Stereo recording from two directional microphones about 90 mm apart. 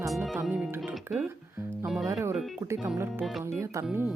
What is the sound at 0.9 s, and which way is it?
Speech, 20° right (ahead or behind).